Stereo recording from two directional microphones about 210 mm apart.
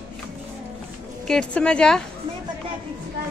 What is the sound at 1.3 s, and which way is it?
Speech, 5° left (ahead or behind).